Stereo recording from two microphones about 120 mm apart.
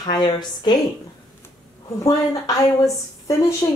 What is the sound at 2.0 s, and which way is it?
A woman's voice, 25° left (ahead or behind).